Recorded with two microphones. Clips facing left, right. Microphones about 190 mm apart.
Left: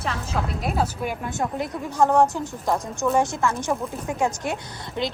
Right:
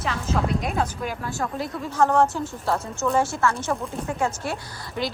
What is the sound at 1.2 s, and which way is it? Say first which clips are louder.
A woman's voice: left 1 dB; 20° left (ahead or behind).